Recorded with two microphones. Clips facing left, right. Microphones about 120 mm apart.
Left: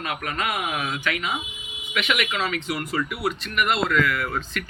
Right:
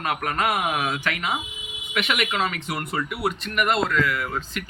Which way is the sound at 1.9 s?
45° right (ahead or behind).